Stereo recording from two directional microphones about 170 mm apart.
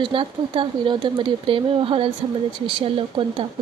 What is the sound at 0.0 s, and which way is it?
Speech, 30° right (ahead or behind).